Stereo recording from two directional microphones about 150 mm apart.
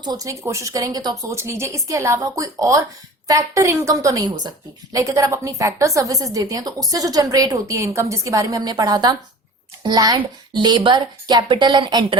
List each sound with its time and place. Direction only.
0.0 s a woman's voice: 25° right (ahead or behind)